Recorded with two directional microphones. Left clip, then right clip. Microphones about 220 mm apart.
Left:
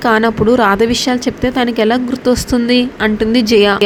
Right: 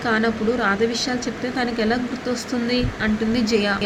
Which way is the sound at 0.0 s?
35° left (ahead or behind).